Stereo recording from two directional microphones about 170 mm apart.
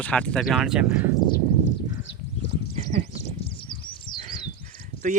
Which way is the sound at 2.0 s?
90° left.